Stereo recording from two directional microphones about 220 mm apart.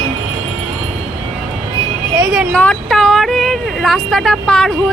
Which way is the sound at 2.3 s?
Centre (ahead or behind).